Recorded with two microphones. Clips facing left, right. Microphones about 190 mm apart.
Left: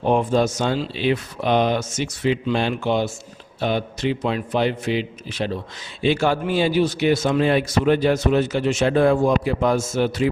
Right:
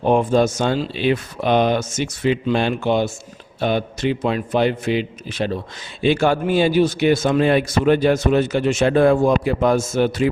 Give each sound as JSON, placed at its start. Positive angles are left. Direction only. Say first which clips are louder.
{"t": 0.0, "sound": "a man's voice", "louder": "right 3 dB", "side_deg": -50}